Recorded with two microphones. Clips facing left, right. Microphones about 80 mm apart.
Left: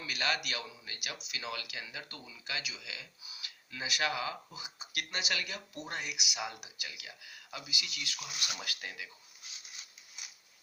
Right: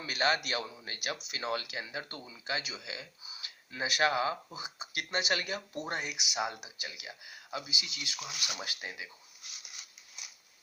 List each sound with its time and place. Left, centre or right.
0.0 s speech: right